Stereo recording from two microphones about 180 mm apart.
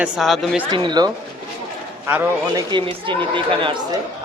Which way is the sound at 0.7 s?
25° right (ahead or behind).